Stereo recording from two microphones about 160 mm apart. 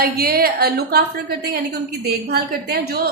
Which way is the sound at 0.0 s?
70° right (ahead or behind).